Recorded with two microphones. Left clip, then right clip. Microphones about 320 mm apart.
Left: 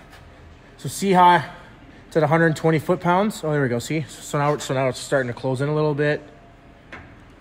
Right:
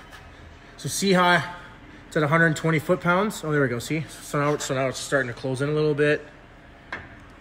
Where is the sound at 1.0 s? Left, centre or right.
Left.